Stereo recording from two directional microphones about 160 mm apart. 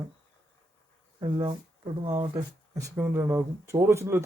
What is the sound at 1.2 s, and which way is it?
Speech, 30° right (ahead or behind).